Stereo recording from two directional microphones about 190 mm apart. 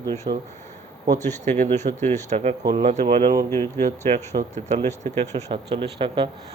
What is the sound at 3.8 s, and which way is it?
Speech, 35° right (ahead or behind).